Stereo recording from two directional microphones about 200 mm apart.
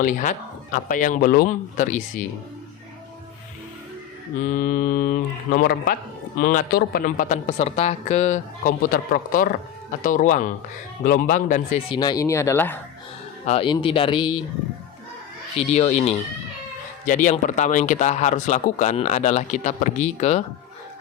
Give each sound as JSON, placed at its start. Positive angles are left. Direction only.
{"t": 0.0, "sound": "speech", "side_deg": 40}
{"t": 4.4, "sound": "speech", "side_deg": 40}
{"t": 11.9, "sound": "speech", "side_deg": 20}
{"t": 13.4, "sound": "speech", "side_deg": 30}
{"t": 15.5, "sound": "speech", "side_deg": 35}